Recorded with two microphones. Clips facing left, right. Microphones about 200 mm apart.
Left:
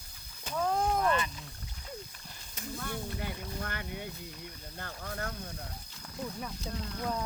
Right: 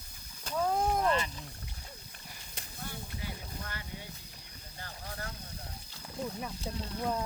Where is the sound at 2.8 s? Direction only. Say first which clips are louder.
Left 3 dB; 55° left (ahead or behind).